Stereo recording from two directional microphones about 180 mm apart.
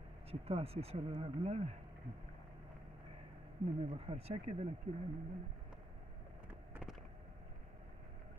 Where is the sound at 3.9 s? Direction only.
35° right (ahead or behind).